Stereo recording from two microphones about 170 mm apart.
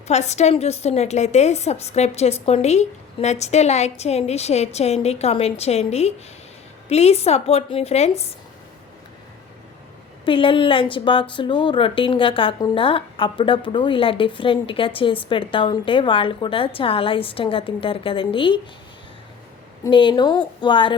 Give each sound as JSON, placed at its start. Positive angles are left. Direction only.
{"t": 0.1, "sound": "speech", "side_deg": 40}
{"t": 10.2, "sound": "speech", "side_deg": 30}
{"t": 19.8, "sound": "a woman's voice", "side_deg": 30}